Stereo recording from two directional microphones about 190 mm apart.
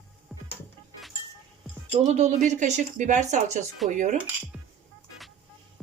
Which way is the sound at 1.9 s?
35° right (ahead or behind).